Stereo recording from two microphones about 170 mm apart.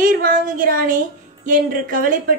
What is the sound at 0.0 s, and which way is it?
Speech, 55° right (ahead or behind).